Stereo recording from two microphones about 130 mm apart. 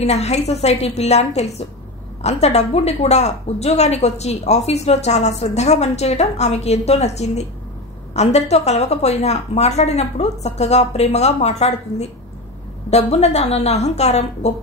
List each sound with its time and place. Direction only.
0.0 s speech: 60° left (ahead or behind)